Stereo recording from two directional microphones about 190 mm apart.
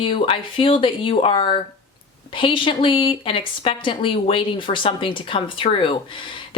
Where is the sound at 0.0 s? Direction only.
30° left (ahead or behind).